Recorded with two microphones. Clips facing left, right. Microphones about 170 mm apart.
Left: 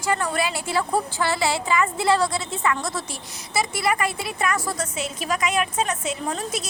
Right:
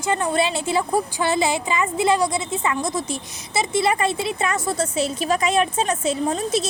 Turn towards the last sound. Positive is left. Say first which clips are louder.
# right 6 dB
turn(degrees=-25)  # may be behind; listen again after turning